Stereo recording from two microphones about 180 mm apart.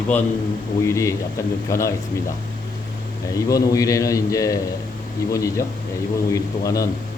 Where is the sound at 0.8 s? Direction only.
15° left (ahead or behind).